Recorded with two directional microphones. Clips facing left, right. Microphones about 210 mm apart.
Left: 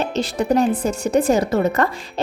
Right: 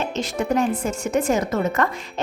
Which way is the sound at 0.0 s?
35° left (ahead or behind).